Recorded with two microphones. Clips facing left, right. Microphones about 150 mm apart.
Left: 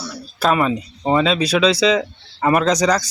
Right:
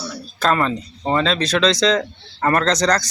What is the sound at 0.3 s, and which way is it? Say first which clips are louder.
Speech: left 2 dB; 10° left (ahead or behind).